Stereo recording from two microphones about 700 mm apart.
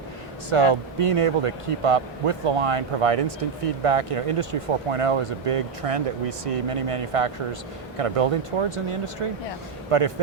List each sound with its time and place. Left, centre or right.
0.5 s a man's voice: right